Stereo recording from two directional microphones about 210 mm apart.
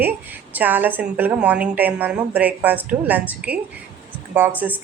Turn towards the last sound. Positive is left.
turn(degrees=-5)  # may be behind; listen again after turning